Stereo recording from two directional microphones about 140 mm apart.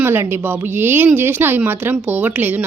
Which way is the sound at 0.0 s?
15° right (ahead or behind).